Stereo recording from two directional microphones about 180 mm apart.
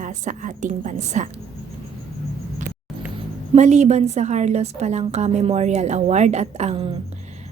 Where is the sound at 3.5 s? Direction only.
40° right (ahead or behind).